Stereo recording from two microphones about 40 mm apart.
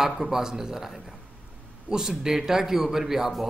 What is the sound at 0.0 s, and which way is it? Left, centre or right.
A man's voice, centre.